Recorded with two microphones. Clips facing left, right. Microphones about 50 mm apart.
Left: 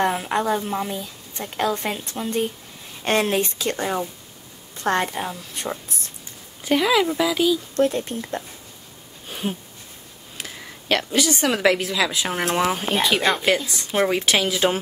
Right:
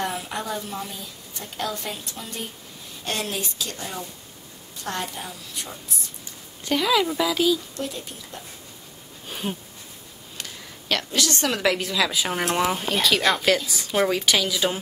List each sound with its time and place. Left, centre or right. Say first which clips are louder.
0.0 s a woman's voice: left 7 dB; left
6.6 s speech: left 3 dB; centre
7.7 s a woman's voice: left 11 dB; left
9.3 s a sound: left 2 dB; centre
10.3 s speech: left 3 dB; centre
12.8 s speech: left 1 dB; left
14.3 s speech: left 3 dB; left